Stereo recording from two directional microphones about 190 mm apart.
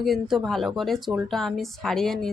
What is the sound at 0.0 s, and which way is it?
Speech, centre (ahead or behind).